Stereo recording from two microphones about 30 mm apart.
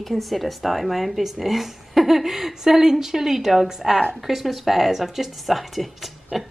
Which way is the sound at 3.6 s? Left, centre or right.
Centre.